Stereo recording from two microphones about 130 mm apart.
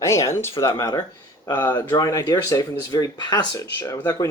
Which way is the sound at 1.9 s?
25° left (ahead or behind).